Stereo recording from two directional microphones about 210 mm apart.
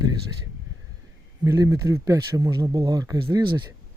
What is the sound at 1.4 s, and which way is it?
Speech, 15° right (ahead or behind).